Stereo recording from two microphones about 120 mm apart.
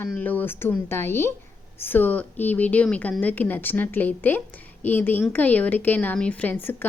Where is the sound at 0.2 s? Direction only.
15° left (ahead or behind).